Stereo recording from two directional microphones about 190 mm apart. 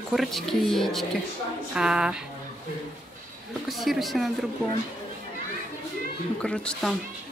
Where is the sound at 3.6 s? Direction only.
Centre (ahead or behind).